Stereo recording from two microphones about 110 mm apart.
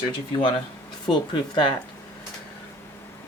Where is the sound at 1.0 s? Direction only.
45° left (ahead or behind).